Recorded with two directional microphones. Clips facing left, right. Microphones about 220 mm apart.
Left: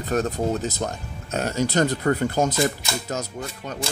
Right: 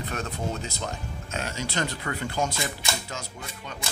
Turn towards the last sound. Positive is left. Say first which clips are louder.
# left 7 dB
turn(degrees=40)  # may be behind; listen again after turning